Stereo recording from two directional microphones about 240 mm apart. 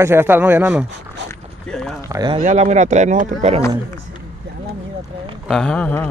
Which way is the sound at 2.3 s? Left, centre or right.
Right.